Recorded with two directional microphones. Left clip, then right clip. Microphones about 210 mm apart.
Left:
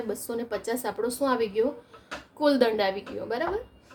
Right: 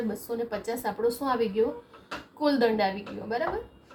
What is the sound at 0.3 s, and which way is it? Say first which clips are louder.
A woman's voice: left 1 dB; 50° left (ahead or behind).